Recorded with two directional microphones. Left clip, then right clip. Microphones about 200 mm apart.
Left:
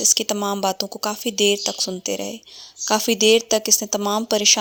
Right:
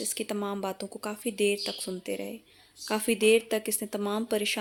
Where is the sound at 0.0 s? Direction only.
40° left (ahead or behind).